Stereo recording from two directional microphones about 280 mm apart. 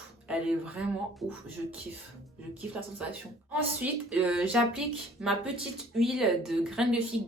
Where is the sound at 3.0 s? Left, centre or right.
Centre.